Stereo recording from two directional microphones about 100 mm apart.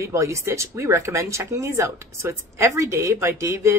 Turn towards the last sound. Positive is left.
turn(degrees=-30)  # may be behind; listen again after turning